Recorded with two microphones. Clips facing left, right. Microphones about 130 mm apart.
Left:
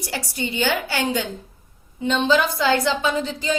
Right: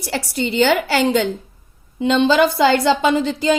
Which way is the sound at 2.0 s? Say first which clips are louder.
Right 5 dB; 90° right.